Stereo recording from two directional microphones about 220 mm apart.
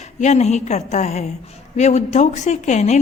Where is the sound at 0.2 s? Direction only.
30° left (ahead or behind).